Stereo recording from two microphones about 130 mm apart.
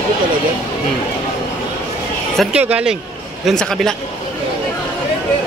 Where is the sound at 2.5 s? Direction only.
10° right (ahead or behind).